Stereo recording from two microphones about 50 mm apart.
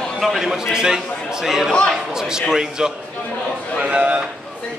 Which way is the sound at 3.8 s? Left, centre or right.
Right.